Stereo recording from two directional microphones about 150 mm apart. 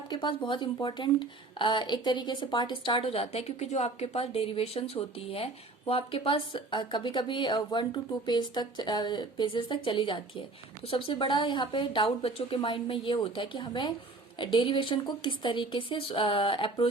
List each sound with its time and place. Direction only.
0.1 s speech: 30° left (ahead or behind)